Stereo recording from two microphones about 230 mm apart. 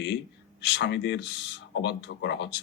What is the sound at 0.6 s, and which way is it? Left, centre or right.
Speech, left.